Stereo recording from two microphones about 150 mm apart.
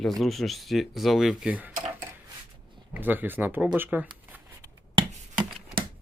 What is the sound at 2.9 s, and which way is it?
Speech, 10° right (ahead or behind).